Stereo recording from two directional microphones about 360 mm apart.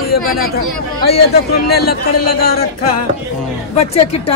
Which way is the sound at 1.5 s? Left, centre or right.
Left.